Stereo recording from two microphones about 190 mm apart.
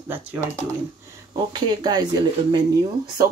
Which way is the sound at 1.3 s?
20° right (ahead or behind).